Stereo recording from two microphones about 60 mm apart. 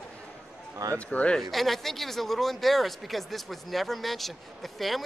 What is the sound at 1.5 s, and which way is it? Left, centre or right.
Speech, centre.